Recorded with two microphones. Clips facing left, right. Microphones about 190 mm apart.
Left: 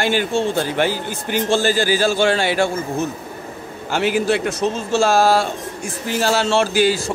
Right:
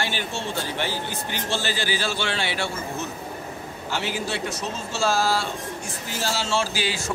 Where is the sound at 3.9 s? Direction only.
55° left (ahead or behind).